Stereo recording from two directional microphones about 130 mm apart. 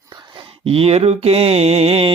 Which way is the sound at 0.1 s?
40° right (ahead or behind).